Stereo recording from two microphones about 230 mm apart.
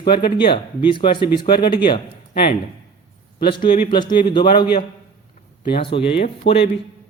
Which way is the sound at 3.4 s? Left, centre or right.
Left.